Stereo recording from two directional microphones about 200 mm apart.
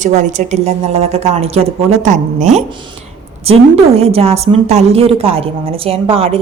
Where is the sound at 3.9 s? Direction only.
30° right (ahead or behind).